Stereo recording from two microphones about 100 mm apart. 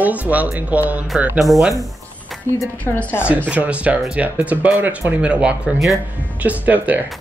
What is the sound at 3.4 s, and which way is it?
Speech, 10° right (ahead or behind).